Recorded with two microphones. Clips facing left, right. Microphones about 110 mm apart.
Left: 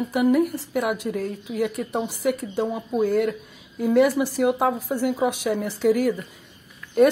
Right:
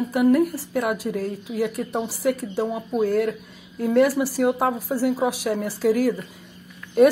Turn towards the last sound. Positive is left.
turn(degrees=0)  # may be behind; listen again after turning